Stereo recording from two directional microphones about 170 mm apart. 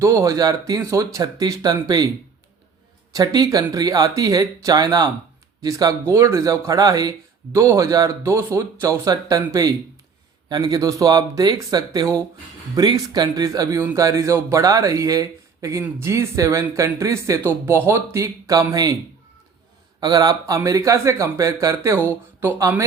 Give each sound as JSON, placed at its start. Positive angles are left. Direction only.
{"t": 0.0, "sound": "speech", "side_deg": -15}
{"t": 3.1, "sound": "speech", "side_deg": -20}
{"t": 20.0, "sound": "speech", "side_deg": -20}